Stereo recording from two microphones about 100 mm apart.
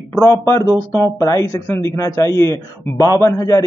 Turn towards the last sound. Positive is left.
turn(degrees=35)  # may be behind; listen again after turning